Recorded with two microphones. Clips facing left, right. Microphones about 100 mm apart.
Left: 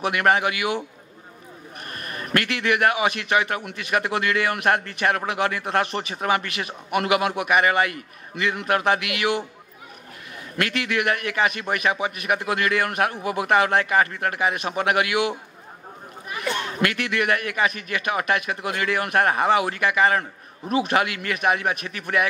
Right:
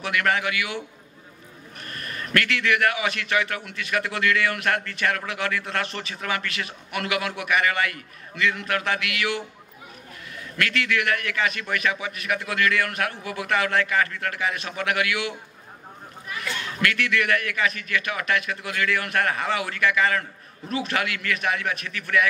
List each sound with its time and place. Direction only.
0.0 s a man's voice: 20° left (ahead or behind)
10.6 s a man's voice: 20° left (ahead or behind)
16.5 s a man's voice: 25° left (ahead or behind)